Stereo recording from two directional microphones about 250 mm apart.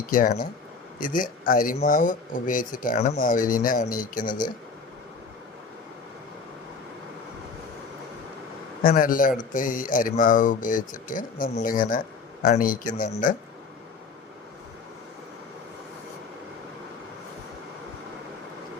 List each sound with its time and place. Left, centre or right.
0.1 s speech: left
8.8 s speech: left